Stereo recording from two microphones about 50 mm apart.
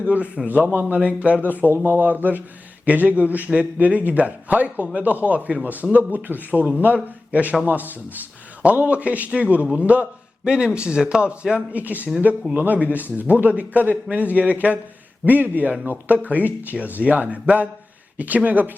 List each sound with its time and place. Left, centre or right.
0.0 s a man's voice: right
0.9 s speech: right
1.7 s speech: right
2.0 s a man's voice: right
10.4 s a man's voice: centre; by 18.7 s right